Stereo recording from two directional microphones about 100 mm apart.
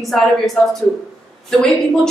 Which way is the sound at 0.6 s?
10° left (ahead or behind).